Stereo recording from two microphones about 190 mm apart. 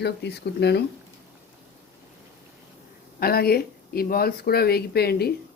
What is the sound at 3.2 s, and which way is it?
Speech, 50° left (ahead or behind).